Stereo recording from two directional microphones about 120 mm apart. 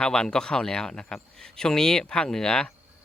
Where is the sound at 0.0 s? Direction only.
5° left (ahead or behind).